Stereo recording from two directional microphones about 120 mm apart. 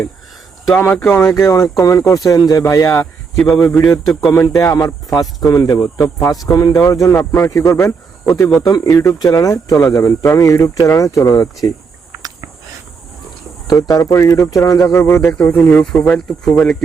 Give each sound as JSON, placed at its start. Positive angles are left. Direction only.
{"t": 0.8, "sound": "speech", "side_deg": 15}
{"t": 3.3, "sound": "a man's voice", "side_deg": 5}
{"t": 4.7, "sound": "speech", "side_deg": 30}
{"t": 12.1, "sound": "a sound", "side_deg": -25}
{"t": 13.7, "sound": "speech", "side_deg": 30}